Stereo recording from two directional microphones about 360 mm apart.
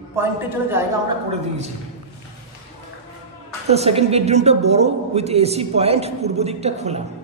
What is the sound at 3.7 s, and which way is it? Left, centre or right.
A woman's voice, centre.